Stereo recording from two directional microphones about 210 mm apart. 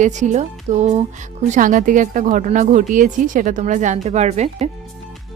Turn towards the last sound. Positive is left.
turn(degrees=-30)  # may be behind; listen again after turning